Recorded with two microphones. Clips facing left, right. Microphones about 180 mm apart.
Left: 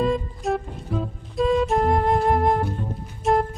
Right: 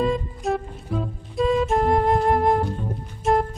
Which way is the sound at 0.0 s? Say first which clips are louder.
Even; centre (ahead or behind).